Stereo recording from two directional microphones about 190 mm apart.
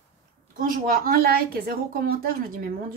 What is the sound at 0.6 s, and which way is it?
A woman's voice, 50° right (ahead or behind).